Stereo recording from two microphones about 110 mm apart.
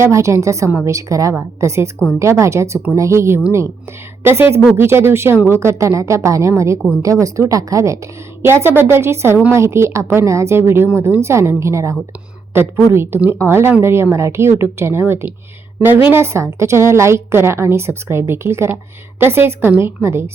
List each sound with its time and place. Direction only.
0.0 s a woman's voice: 25° right (ahead or behind)